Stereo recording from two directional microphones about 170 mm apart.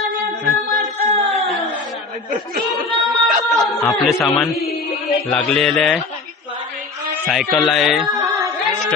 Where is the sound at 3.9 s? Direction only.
Centre (ahead or behind).